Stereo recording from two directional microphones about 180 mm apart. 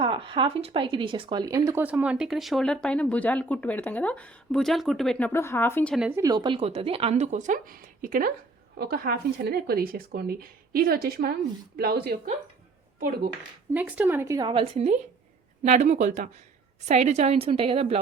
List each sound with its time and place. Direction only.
0.0 s speech: 30° right (ahead or behind); by 5.3 s centre (ahead or behind)
5.3 s speech: 15° left (ahead or behind)
5.9 s speech: 5° right (ahead or behind)
6.1 s a woman's voice: 20° right (ahead or behind); by 12.1 s 60° right (ahead or behind)
13.7 s a woman's voice: 10° right (ahead or behind); by 18.0 s 30° right (ahead or behind)